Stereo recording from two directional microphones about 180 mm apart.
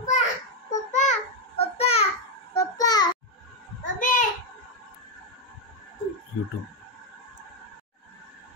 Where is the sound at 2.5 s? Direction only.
20° left (ahead or behind).